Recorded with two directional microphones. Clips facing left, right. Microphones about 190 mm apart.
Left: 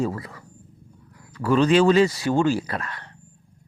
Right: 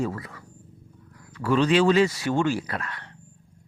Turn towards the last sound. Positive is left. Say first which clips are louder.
# left 2 dB
turn(degrees=35)  # may be behind; listen again after turning